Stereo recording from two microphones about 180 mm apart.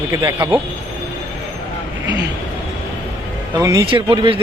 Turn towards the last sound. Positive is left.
turn(degrees=-30)  # may be behind; listen again after turning